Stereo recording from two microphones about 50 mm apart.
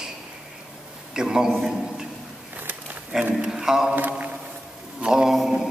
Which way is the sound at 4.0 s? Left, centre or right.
Right.